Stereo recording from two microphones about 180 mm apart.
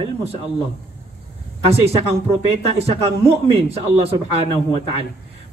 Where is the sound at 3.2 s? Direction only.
15° right (ahead or behind).